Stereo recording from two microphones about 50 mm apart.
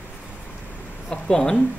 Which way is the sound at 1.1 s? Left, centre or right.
Centre.